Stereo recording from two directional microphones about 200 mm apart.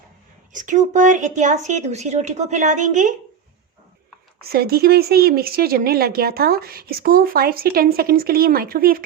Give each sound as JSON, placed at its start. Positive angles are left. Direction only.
{"t": 0.5, "sound": "speech", "side_deg": -40}
{"t": 4.4, "sound": "speech", "side_deg": -50}